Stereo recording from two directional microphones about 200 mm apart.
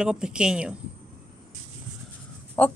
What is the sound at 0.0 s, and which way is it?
Speech, 5° right (ahead or behind).